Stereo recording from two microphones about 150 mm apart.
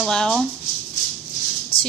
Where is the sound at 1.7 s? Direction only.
35° left (ahead or behind).